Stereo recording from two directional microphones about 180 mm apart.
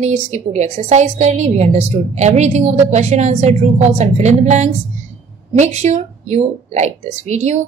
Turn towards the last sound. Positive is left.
turn(degrees=-40)  # may be behind; listen again after turning